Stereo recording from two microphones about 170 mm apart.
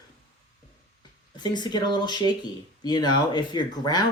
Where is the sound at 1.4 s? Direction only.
25° left (ahead or behind).